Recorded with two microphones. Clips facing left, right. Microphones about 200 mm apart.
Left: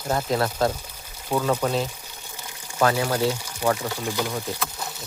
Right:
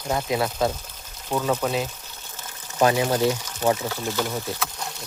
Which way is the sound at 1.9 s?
10° left (ahead or behind).